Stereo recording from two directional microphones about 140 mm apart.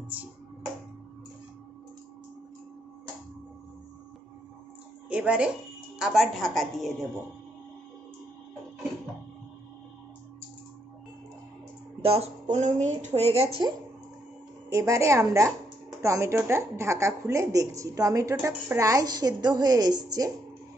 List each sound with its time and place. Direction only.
5.1 s a woman's voice: 10° right (ahead or behind)
12.0 s speech: 45° right (ahead or behind)
14.7 s speech: 20° right (ahead or behind)